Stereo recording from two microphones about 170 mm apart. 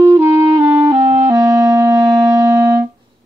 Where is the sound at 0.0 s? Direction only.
15° right (ahead or behind).